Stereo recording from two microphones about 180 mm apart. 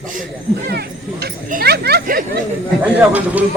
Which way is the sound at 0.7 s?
60° right (ahead or behind).